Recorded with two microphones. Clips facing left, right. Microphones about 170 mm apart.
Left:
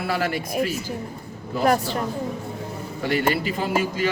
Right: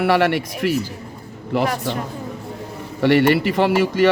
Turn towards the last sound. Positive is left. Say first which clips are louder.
# right 7 dB
turn(degrees=-75)  # may be behind; listen again after turning